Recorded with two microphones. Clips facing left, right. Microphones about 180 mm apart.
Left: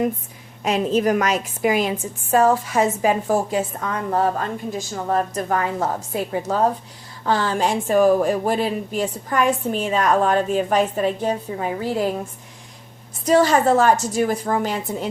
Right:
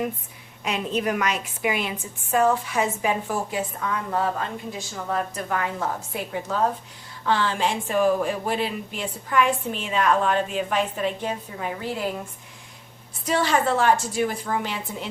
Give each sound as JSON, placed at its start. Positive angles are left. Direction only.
{"t": 0.6, "sound": "a woman's voice", "side_deg": 40}
{"t": 13.2, "sound": "a woman's voice", "side_deg": 40}